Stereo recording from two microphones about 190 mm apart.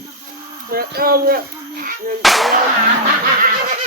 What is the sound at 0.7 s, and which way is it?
Speech, 50° right (ahead or behind).